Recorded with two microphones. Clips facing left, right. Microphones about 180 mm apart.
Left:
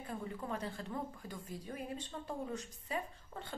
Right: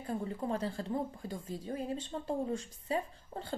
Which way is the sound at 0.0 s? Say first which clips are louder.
Right 6 dB; 30° right (ahead or behind).